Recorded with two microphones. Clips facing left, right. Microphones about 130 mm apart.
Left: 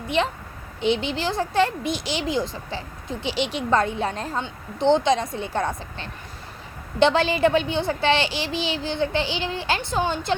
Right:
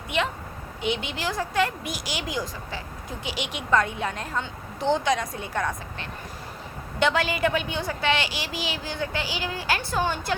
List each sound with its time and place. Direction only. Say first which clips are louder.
0.2 s a woman's voice: left 3 dB; 30° left (ahead or behind)